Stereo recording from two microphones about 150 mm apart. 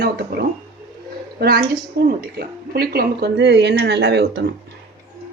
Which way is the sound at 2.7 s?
90° right.